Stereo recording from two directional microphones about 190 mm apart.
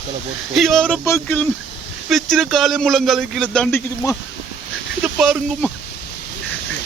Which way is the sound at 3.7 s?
10° left (ahead or behind).